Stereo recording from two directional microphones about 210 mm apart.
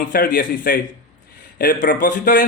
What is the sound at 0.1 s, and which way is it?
Speech, 45° left (ahead or behind).